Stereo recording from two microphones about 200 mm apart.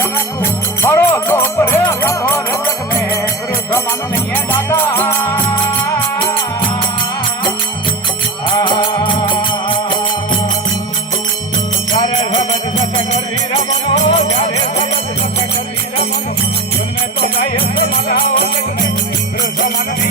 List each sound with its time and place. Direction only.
0.0 s music: 10° left (ahead or behind)
8.4 s music: 25° left (ahead or behind)
12.3 s jingle bell: 35° left (ahead or behind)
13.7 s jingle bell: 35° left (ahead or behind)
17.2 s music: 50° left (ahead or behind)